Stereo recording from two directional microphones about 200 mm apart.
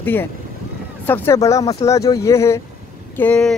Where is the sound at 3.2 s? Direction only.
5° left (ahead or behind).